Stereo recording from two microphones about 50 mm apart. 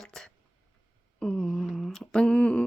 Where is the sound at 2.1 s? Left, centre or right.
Centre.